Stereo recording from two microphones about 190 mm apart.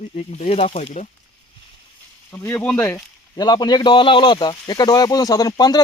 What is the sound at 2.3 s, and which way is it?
Speech, 10° left (ahead or behind).